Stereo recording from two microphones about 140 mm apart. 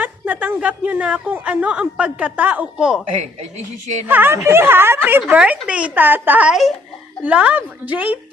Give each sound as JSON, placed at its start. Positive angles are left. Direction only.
{"t": 0.0, "sound": "speech", "side_deg": -10}
{"t": 4.0, "sound": "speech", "side_deg": -15}